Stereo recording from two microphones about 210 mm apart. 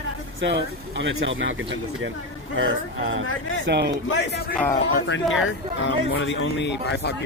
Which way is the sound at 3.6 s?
55° right (ahead or behind).